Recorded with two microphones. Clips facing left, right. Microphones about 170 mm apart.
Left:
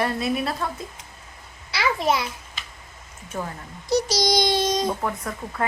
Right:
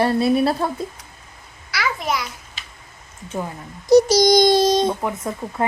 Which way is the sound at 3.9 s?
50° right (ahead or behind).